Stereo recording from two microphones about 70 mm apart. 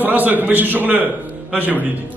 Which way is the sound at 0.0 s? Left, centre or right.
Right.